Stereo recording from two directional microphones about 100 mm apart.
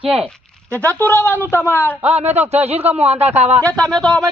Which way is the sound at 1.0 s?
20° left (ahead or behind).